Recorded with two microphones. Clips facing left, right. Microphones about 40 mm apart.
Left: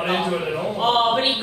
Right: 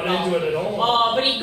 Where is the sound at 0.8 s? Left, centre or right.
Centre.